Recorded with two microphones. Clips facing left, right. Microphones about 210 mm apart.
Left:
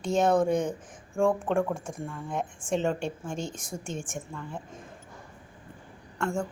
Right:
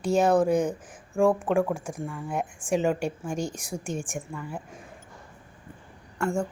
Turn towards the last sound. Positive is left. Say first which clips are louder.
# right 3 dB
turn(degrees=-10)  # may be behind; listen again after turning